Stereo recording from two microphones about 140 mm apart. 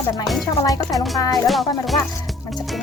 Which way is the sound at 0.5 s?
25° left (ahead or behind).